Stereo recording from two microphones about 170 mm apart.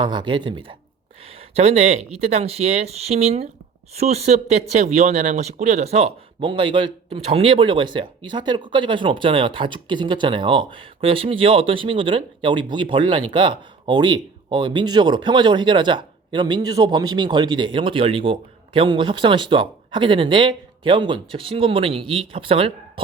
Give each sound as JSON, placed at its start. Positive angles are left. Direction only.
{"t": 0.0, "sound": "speech", "side_deg": -25}